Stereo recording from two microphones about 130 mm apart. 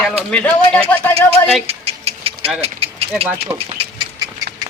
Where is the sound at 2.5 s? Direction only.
50° right (ahead or behind).